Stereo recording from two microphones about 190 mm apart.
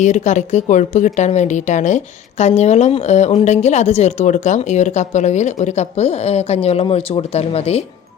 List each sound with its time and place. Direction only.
0.0 s a woman's voice: 40° left (ahead or behind)